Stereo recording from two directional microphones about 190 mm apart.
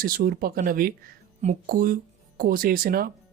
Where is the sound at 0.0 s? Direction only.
50° right (ahead or behind).